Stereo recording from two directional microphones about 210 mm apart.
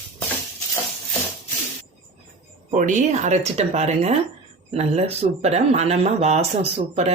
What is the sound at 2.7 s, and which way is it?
Speech, 35° right (ahead or behind).